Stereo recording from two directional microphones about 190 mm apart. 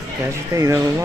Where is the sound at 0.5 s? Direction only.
15° right (ahead or behind).